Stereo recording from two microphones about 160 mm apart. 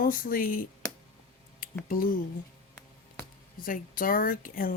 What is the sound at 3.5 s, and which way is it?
A woman's voice, 60° left (ahead or behind).